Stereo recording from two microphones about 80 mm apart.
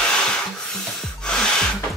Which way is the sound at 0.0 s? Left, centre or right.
Centre.